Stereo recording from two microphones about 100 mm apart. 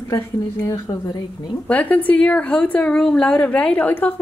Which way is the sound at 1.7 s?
15° left (ahead or behind).